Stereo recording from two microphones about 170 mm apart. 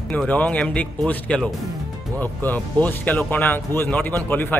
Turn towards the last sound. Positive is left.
turn(degrees=10)  # may be behind; listen again after turning